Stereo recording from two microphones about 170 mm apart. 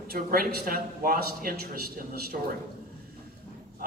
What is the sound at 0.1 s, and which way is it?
A man's voice, 60° right (ahead or behind).